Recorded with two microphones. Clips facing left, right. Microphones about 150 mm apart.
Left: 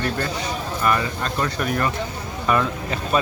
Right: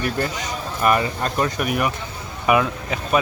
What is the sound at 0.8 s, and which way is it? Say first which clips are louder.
Speech: right 4 dB; 20° right (ahead or behind).